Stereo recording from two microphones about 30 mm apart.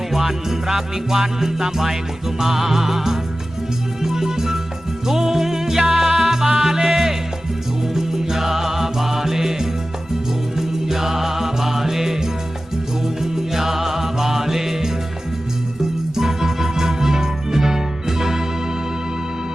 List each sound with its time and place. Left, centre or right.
0.1 s music: centre
13.5 s music: centre
16.1 s music: centre